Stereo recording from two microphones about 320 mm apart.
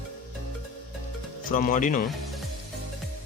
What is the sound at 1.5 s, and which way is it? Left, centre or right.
Speech, left.